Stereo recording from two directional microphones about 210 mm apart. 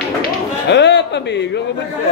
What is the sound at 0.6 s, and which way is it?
Speech, 55° left (ahead or behind).